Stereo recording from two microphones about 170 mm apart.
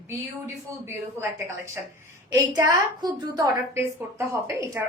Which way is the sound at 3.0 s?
15° right (ahead or behind).